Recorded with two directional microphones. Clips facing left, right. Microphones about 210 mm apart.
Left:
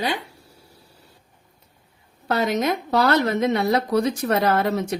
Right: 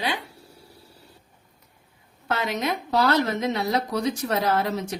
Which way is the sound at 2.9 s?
55° left (ahead or behind).